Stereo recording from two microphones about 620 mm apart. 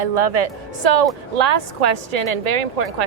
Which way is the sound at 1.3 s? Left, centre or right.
Right.